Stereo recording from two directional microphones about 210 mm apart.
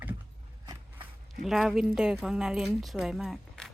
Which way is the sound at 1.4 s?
Centre (ahead or behind).